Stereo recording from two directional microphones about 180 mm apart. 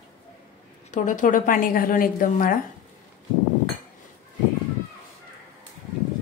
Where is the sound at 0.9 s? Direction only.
45° left (ahead or behind).